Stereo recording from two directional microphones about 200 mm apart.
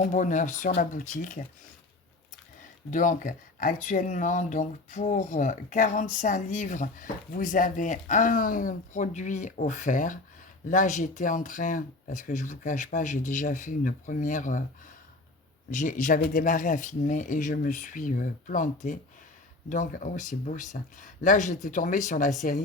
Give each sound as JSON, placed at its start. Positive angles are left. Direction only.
{"t": 0.0, "sound": "speech", "side_deg": 40}
{"t": 2.9, "sound": "speech", "side_deg": 40}
{"t": 15.7, "sound": "speech", "side_deg": 40}